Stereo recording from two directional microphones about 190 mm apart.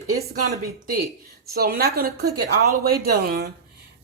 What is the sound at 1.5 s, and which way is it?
Speech, 55° right (ahead or behind).